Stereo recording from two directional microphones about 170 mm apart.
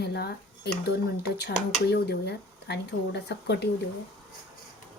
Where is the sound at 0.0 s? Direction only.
75° left (ahead or behind).